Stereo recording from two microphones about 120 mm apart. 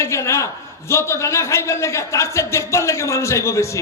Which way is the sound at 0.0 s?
25° left (ahead or behind).